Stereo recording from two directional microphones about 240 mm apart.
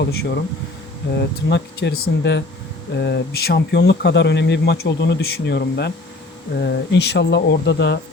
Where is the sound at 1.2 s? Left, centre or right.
Left.